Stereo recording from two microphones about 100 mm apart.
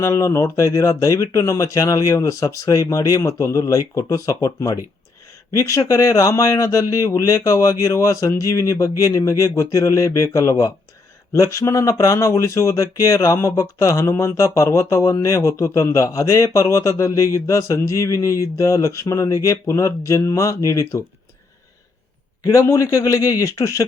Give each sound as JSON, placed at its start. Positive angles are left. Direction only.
{"t": 0.0, "sound": "speech", "side_deg": 30}
{"t": 22.4, "sound": "speech", "side_deg": 35}